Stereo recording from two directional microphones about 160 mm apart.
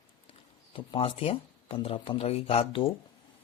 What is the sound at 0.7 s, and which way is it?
Speech, 35° left (ahead or behind).